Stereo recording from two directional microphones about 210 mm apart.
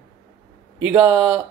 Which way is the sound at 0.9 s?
15° right (ahead or behind).